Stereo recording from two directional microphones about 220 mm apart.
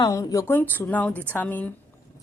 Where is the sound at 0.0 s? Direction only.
15° left (ahead or behind).